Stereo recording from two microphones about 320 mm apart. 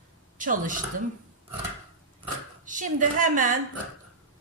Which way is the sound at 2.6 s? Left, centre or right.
Right.